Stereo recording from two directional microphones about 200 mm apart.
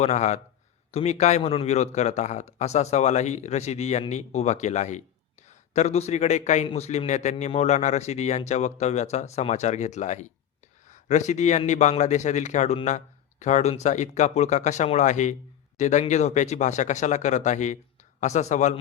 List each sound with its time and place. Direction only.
0.0 s speech: 35° left (ahead or behind)